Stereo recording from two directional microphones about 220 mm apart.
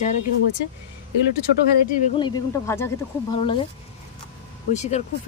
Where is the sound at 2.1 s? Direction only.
20° left (ahead or behind).